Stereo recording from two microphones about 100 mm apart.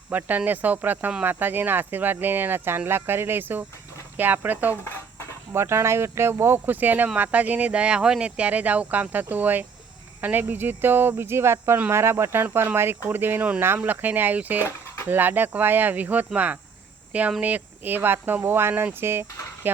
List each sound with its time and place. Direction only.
0.1 s speech: 15° right (ahead or behind)
14.6 s a sound: 25° left (ahead or behind)
15.0 s speech: 20° right (ahead or behind)